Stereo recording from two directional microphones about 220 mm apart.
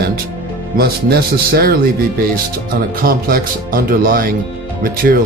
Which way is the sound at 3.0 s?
40° right (ahead or behind).